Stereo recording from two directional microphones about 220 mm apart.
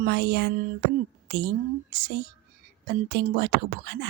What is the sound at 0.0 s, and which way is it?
Speech, 45° right (ahead or behind).